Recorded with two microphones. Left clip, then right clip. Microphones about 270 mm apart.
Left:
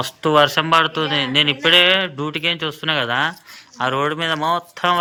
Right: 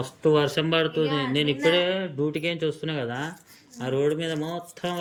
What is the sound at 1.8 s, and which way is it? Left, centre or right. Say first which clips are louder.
Speech: left 10 dB; left.